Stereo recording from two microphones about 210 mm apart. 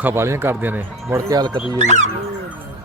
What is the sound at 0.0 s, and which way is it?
Speech, 10° right (ahead or behind).